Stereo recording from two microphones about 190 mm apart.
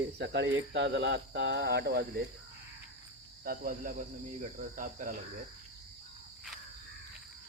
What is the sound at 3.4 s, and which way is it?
Cricket, 50° right (ahead or behind).